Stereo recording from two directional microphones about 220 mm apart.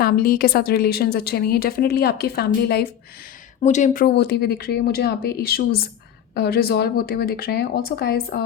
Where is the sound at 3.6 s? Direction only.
35° left (ahead or behind).